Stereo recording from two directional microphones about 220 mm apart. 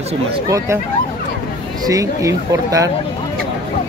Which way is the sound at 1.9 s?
15° right (ahead or behind).